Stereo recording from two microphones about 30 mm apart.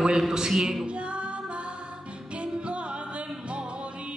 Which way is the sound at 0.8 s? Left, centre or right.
Right.